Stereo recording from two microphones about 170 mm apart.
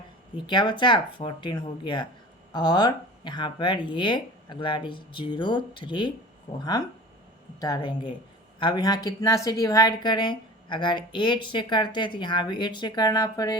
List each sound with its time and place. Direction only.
0.4 s a woman's voice: 25° left (ahead or behind)